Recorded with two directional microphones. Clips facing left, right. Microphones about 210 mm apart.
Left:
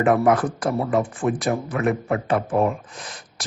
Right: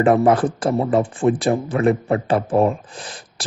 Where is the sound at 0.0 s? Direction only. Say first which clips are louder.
Right 3 dB; 30° right (ahead or behind).